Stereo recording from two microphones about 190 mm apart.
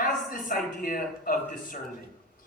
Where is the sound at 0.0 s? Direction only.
45° left (ahead or behind).